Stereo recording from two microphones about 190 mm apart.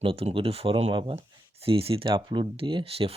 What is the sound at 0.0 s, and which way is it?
Speech, 30° right (ahead or behind).